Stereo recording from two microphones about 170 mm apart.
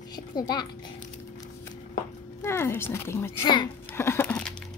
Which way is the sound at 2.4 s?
15° left (ahead or behind).